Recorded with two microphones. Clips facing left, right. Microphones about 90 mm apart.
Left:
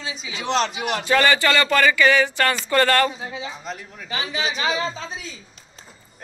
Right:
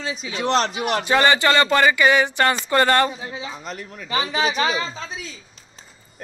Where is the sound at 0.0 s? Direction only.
45° right (ahead or behind).